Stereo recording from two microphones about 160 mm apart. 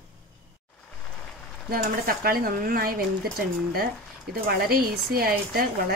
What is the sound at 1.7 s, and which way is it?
Speech, 65° right (ahead or behind).